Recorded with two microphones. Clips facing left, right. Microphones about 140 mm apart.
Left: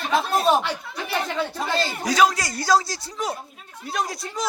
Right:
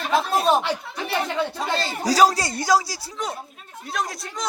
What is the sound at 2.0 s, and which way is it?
Speech, 35° right (ahead or behind).